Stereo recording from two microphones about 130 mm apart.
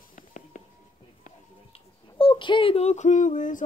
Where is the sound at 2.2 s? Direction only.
40° left (ahead or behind); by 3.6 s 80° left.